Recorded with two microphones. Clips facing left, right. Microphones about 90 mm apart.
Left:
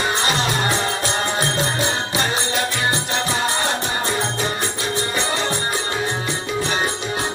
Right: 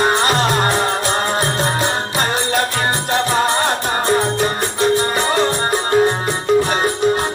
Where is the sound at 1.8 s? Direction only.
45° right (ahead or behind).